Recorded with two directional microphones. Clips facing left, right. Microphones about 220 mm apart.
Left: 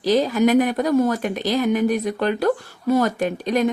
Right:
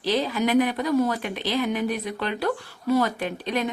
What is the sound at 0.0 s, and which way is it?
Speech, 45° left (ahead or behind).